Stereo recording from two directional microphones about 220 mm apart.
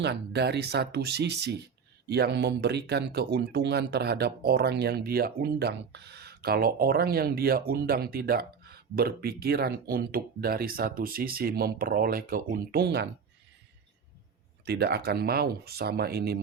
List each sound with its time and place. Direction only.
0.0 s speech: 50° right (ahead or behind)
14.6 s speech: 45° right (ahead or behind)